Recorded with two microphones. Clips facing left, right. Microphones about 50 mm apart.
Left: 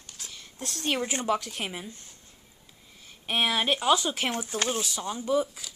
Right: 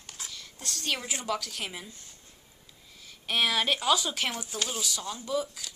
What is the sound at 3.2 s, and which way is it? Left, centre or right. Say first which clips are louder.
Speech: left 1 dB; left.